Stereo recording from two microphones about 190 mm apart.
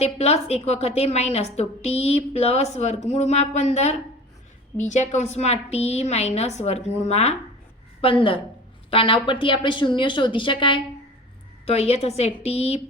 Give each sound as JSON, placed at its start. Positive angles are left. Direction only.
{"t": 0.0, "sound": "a woman's voice", "side_deg": 35}